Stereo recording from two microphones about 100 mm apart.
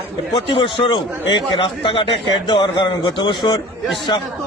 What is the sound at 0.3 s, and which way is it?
A man's voice, 60° left (ahead or behind).